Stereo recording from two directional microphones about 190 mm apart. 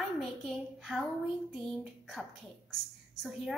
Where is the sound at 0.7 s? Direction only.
Centre (ahead or behind).